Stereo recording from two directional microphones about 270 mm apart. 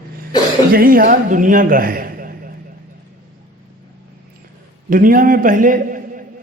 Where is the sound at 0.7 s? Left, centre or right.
Right.